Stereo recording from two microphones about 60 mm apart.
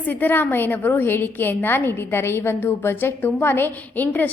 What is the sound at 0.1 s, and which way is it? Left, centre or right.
A woman's voice, left.